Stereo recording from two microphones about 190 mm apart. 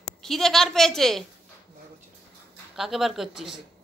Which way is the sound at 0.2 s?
Centre (ahead or behind).